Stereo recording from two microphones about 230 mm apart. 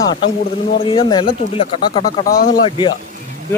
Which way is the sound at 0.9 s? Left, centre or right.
Left.